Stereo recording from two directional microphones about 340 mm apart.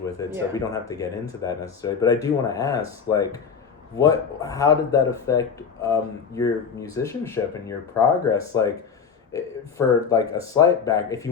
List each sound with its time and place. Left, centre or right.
0.0 s speech: centre